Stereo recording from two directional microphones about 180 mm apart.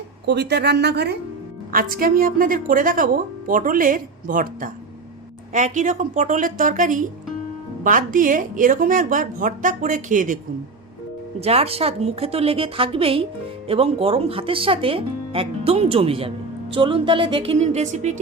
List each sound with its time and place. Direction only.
0.3 s a woman's voice: 70° right (ahead or behind)
1.7 s a woman's voice: 50° right (ahead or behind)
11.3 s speech: 35° right (ahead or behind)